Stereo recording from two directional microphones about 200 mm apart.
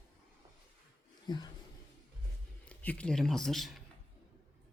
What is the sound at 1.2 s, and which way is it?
Speech, 20° left (ahead or behind).